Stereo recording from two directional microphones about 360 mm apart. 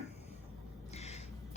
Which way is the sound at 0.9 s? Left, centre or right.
Centre.